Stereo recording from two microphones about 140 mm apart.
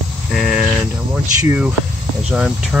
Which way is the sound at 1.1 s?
10° right (ahead or behind).